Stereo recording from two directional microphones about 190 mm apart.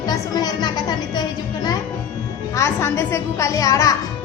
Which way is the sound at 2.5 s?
15° left (ahead or behind).